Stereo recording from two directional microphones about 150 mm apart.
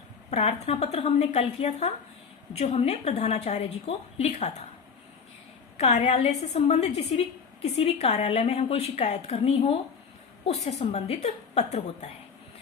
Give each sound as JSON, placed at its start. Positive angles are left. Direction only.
{"t": 0.3, "sound": "speech", "side_deg": 50}
{"t": 5.7, "sound": "speech", "side_deg": 45}